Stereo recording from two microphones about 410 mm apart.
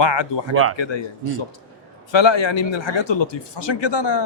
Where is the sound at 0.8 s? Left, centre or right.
Left.